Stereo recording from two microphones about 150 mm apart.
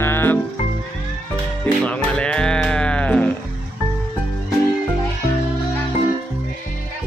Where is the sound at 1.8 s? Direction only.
5° left (ahead or behind).